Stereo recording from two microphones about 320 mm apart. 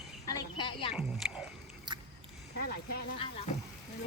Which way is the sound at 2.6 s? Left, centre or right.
Left.